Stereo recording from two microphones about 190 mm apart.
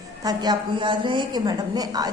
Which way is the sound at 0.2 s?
20° right (ahead or behind).